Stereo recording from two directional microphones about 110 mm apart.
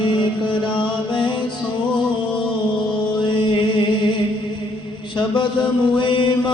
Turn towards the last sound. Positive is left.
turn(degrees=50)  # may be behind; listen again after turning